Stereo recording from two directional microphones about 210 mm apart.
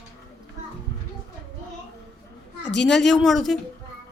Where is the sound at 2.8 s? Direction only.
Centre (ahead or behind).